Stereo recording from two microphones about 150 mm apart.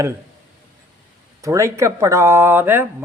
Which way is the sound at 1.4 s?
20° right (ahead or behind).